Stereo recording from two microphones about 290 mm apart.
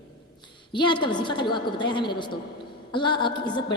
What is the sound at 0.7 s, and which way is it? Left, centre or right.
A woman's voice, centre.